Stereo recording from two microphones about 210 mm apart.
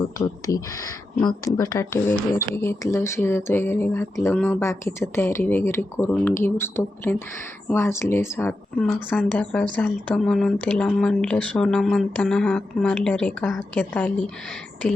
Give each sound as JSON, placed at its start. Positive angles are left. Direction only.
{"t": 0.4, "sound": "speech", "side_deg": 15}